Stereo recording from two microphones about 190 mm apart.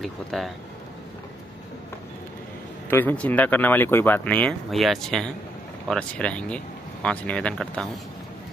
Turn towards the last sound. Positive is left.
turn(degrees=5)  # may be behind; listen again after turning